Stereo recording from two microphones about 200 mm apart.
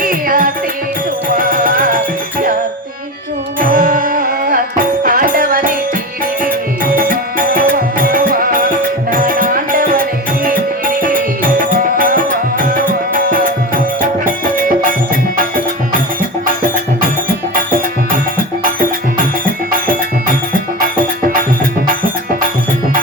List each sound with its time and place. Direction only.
0.0 s music: 45° right (ahead or behind)
3.6 s music: 45° right (ahead or behind)
6.9 s music: 45° right (ahead or behind)